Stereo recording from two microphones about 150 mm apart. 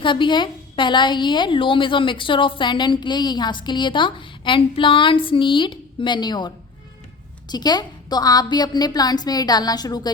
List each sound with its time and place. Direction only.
0.0 s a woman's voice: 35° left (ahead or behind)